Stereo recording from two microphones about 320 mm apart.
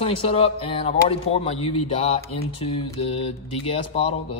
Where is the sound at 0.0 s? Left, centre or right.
Centre.